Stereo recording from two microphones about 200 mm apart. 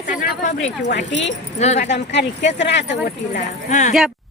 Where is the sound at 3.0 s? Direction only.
40° left (ahead or behind).